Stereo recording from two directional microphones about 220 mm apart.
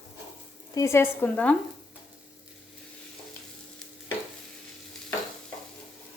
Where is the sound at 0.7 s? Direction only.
10° left (ahead or behind).